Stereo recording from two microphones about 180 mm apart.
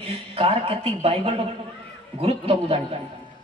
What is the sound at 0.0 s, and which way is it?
A man's voice, 35° right (ahead or behind).